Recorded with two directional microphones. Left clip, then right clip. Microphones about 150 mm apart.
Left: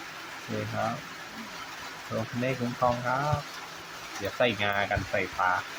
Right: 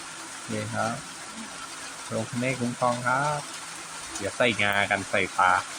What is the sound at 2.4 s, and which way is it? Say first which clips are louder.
Speech: right 1 dB; 10° right (ahead or behind).